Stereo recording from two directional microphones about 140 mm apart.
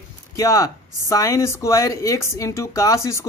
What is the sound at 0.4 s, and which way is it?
Speech, 25° left (ahead or behind).